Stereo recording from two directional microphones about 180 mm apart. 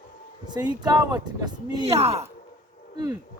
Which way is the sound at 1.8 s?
35° right (ahead or behind).